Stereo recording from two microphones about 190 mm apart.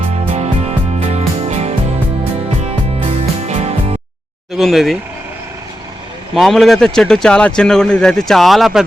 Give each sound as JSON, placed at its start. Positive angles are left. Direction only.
{"t": 0.3, "sound": "music", "side_deg": -35}
{"t": 4.5, "sound": "speech", "side_deg": 0}
{"t": 6.3, "sound": "speech", "side_deg": 0}